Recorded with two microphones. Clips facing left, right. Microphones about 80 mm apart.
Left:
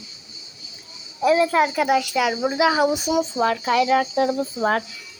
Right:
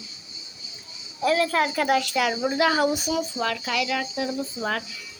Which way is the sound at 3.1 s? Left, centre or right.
Left.